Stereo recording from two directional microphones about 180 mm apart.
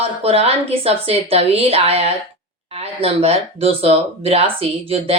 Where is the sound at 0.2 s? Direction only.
35° right (ahead or behind).